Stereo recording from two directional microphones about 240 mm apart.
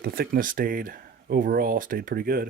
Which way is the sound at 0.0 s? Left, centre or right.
Right.